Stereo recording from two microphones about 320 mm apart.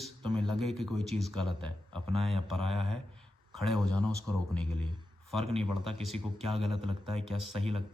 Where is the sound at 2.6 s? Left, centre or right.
Centre.